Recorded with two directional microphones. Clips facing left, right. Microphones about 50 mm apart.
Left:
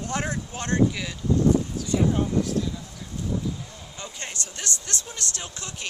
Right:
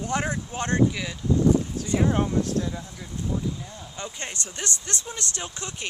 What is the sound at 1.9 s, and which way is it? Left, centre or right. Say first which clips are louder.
Speech: even; right.